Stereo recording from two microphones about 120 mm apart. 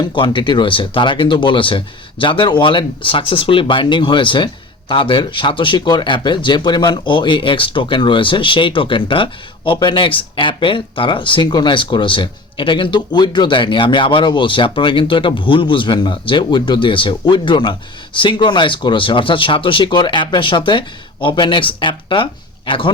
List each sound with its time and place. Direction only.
0.0 s speech: 45° left (ahead or behind)